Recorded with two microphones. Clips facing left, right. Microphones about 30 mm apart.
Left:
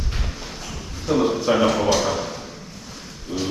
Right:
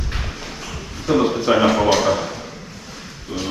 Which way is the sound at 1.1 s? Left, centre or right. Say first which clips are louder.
Right 3 dB; right.